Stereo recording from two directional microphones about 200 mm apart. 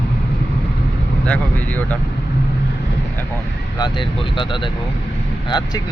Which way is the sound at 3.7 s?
20° left (ahead or behind).